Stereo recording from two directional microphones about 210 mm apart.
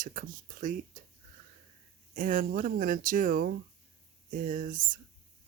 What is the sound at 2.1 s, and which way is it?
Speech, 40° right (ahead or behind).